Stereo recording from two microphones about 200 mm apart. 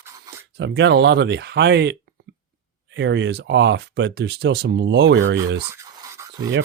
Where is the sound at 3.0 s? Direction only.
65° right (ahead or behind).